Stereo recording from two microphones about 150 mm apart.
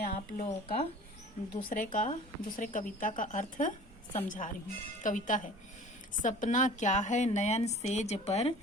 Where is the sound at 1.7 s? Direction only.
60° left (ahead or behind).